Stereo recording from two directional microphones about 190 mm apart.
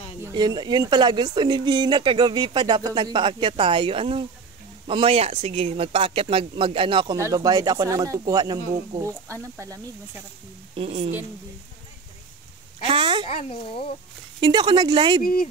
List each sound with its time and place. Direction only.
0.3 s speech: 20° right (ahead or behind)
10.8 s a woman's voice: 30° right (ahead or behind)
12.8 s speech: 25° right (ahead or behind)
13.3 s speech: 30° left (ahead or behind)
14.4 s speech: 25° right (ahead or behind)